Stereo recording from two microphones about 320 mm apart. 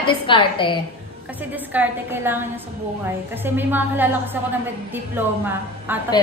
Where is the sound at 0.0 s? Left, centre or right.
Centre.